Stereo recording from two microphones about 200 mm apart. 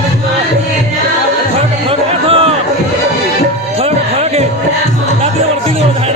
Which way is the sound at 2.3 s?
30° right (ahead or behind).